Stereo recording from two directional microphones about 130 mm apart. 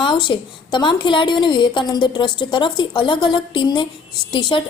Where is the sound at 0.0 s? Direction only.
35° left (ahead or behind).